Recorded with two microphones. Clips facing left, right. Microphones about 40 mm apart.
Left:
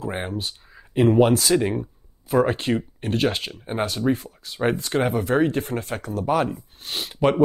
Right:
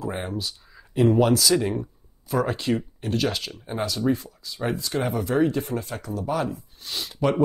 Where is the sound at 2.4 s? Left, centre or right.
Left.